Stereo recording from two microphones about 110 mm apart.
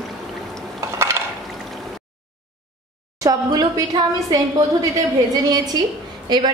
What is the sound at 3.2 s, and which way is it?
A woman's voice, 35° right (ahead or behind).